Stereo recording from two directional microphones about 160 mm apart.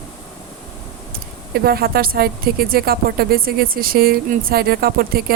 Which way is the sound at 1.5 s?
75° right (ahead or behind).